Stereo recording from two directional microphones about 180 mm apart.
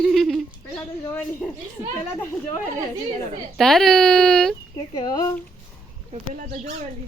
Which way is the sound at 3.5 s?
Centre (ahead or behind).